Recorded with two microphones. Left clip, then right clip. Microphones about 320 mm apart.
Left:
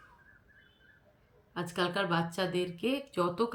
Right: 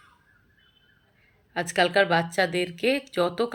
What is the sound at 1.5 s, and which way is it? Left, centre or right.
A woman's voice, left.